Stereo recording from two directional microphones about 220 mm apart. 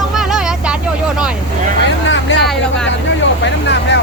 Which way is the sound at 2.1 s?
55° left (ahead or behind).